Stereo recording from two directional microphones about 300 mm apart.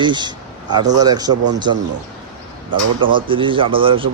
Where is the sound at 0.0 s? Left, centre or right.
Centre.